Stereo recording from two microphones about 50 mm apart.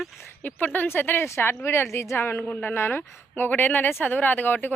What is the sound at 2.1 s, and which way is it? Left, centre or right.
Speech, left.